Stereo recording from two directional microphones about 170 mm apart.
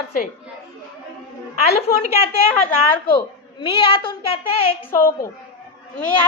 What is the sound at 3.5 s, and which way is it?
A woman's voice, 30° left (ahead or behind).